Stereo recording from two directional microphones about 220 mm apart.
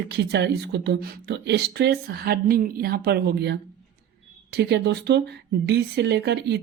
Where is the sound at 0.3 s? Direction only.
50° right (ahead or behind).